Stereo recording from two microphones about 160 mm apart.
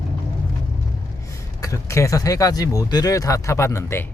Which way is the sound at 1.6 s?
20° left (ahead or behind).